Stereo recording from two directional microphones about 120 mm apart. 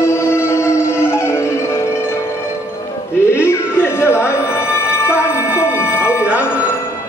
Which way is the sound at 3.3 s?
20° left (ahead or behind).